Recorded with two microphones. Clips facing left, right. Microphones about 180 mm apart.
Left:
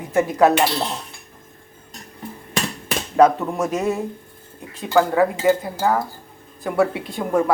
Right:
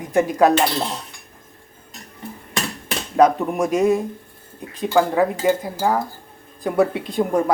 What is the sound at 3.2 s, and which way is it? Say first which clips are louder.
Speech: even; 15° right (ahead or behind).